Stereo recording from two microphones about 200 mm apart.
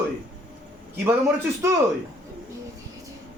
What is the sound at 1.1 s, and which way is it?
Speech, 10° right (ahead or behind).